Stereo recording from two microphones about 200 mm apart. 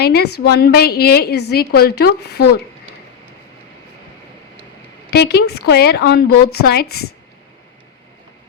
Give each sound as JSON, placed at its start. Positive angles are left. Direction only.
{"t": 0.0, "sound": "a woman's voice", "side_deg": 55}
{"t": 5.1, "sound": "a woman's voice", "side_deg": 55}